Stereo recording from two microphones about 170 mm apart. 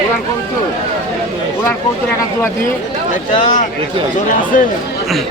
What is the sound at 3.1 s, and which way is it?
Speech, 50° left (ahead or behind).